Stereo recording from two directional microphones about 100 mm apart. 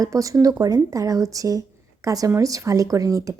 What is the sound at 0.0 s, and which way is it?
Speech, 35° right (ahead or behind).